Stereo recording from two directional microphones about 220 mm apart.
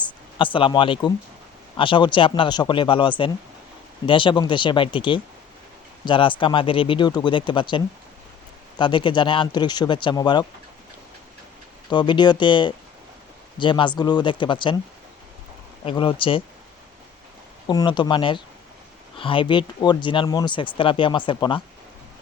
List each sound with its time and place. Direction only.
0.0 s speech: 20° left (ahead or behind)
8.8 s speech: 20° left (ahead or behind)
11.9 s speech: 20° left (ahead or behind)
15.8 s speech: 25° left (ahead or behind)
17.7 s speech: 20° left (ahead or behind)